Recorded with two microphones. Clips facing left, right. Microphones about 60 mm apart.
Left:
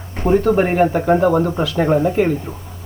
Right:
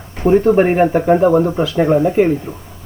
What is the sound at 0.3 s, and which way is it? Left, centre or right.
Speech, right.